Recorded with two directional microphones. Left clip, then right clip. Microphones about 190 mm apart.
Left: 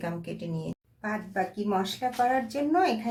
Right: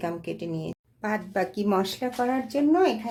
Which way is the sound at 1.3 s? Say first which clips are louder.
Right 3 dB; 55° right (ahead or behind).